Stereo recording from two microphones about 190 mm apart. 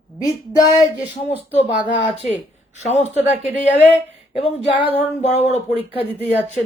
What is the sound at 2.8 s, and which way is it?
Speech, 35° left (ahead or behind).